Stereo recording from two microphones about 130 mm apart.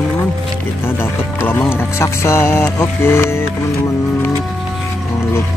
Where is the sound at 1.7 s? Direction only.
20° left (ahead or behind).